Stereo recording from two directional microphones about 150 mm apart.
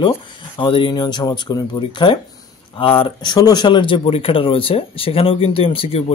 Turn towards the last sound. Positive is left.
turn(degrees=40)  # may be behind; listen again after turning